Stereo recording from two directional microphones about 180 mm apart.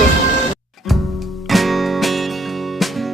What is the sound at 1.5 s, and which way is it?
Music, centre (ahead or behind).